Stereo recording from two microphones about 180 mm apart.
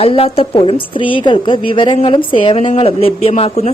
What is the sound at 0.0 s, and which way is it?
A woman's voice, 30° left (ahead or behind).